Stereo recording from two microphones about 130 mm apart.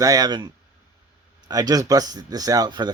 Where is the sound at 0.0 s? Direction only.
25° right (ahead or behind).